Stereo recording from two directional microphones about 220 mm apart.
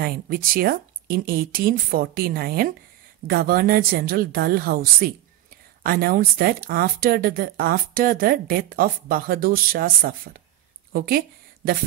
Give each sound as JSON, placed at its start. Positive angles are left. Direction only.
{"t": 0.0, "sound": "a woman's voice", "side_deg": -40}